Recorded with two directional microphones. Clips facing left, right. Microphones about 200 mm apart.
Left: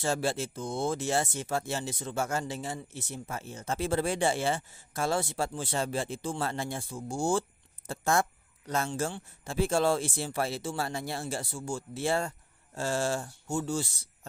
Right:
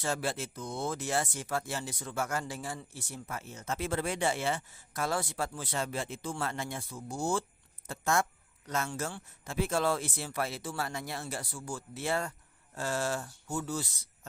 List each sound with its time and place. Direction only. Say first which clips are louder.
0.0 s speech: left 4 dB; 30° left (ahead or behind)